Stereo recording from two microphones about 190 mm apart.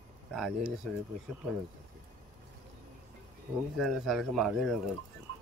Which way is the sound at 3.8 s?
Centre (ahead or behind).